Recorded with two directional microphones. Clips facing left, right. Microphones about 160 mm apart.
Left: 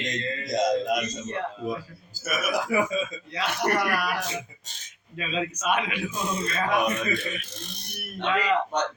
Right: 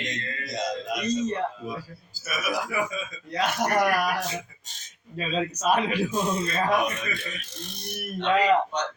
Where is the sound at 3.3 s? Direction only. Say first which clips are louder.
Right 2 dB; 45° right (ahead or behind).